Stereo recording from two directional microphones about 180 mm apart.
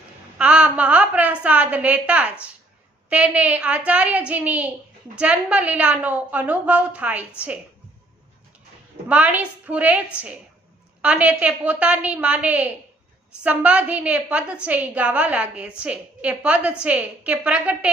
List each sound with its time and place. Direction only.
0.3 s a woman's voice: 5° right (ahead or behind)
9.0 s a woman's voice: 10° right (ahead or behind)